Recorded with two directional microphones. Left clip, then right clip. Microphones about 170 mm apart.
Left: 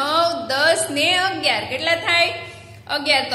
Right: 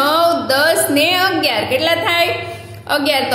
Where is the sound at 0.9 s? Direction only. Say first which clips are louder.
Right 5 dB; 15° right (ahead or behind).